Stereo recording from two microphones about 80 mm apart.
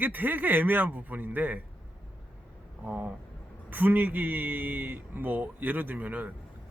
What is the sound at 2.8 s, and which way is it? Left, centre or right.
Speech, right.